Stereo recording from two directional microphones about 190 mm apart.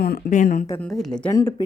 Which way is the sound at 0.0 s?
50° left (ahead or behind).